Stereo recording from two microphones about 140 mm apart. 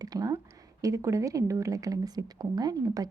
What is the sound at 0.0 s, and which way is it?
Speech, 25° right (ahead or behind).